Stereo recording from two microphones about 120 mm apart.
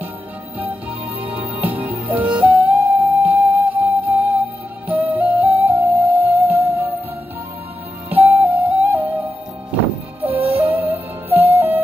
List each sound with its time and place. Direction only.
0.6 s music: 15° right (ahead or behind)
8.1 s music: 15° right (ahead or behind)
10.2 s music: 15° right (ahead or behind)